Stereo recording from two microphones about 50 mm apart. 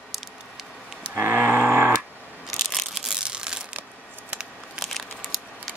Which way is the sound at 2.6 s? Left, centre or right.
Centre.